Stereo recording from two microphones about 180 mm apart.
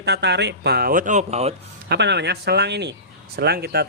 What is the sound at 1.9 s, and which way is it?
Speech, 70° right (ahead or behind).